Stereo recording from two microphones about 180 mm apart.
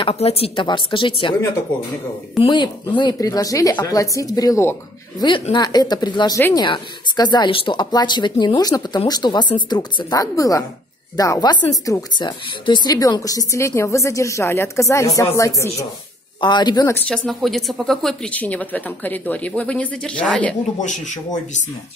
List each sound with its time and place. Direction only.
0.0 s speech: 35° left (ahead or behind)
2.4 s speech: 25° left (ahead or behind)
16.9 s speech: 5° left (ahead or behind)
20.8 s speech: 45° left (ahead or behind)